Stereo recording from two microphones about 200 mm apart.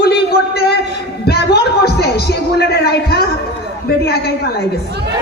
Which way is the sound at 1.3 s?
55° left (ahead or behind).